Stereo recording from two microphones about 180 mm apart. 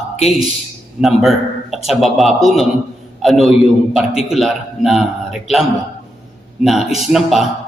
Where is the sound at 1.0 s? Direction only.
Centre (ahead or behind).